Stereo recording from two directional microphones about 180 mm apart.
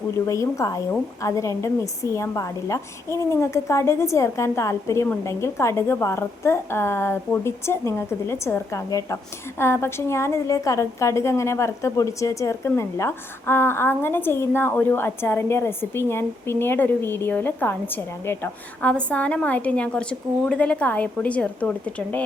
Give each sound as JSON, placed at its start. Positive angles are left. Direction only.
{"t": 0.3, "sound": "a woman's voice", "side_deg": 15}